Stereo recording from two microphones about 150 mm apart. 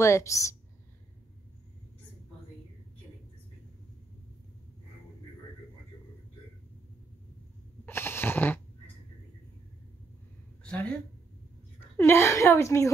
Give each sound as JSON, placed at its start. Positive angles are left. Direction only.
{"t": 0.0, "sound": "a woman's voice", "side_deg": 20}
{"t": 7.8, "sound": "a sound", "side_deg": 15}
{"t": 10.6, "sound": "speech", "side_deg": 10}
{"t": 12.0, "sound": "a woman's voice", "side_deg": 15}